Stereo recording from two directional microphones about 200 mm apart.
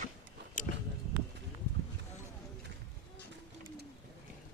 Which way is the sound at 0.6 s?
40° left (ahead or behind).